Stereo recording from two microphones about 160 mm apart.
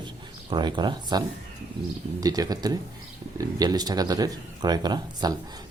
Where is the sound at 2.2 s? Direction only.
25° right (ahead or behind).